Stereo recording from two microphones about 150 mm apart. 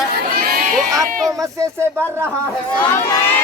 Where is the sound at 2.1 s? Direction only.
15° right (ahead or behind).